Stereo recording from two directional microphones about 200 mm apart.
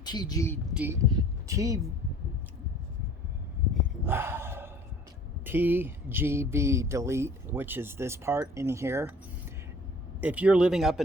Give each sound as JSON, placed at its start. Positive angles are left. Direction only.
{"t": 0.0, "sound": "speech", "side_deg": 20}
{"t": 0.7, "sound": "speech", "side_deg": -5}
{"t": 1.1, "sound": "a sound", "side_deg": -15}
{"t": 4.0, "sound": "a sound", "side_deg": -10}
{"t": 5.5, "sound": "speech", "side_deg": -10}
{"t": 10.2, "sound": "speech", "side_deg": -5}